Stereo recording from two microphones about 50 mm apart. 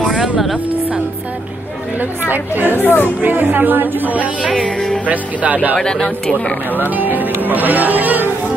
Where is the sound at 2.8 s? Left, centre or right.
Left.